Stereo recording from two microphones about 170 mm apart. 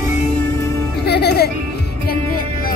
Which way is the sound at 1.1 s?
75° left (ahead or behind).